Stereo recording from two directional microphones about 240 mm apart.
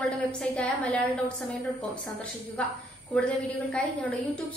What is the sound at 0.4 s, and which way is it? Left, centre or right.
Speech, centre.